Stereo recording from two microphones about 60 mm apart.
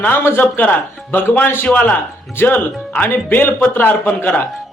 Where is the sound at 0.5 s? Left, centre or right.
Left.